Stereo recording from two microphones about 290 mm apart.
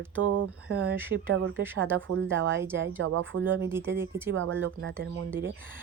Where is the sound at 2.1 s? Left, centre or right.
Right.